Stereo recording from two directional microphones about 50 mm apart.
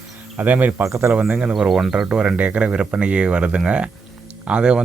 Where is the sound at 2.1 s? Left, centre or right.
Right.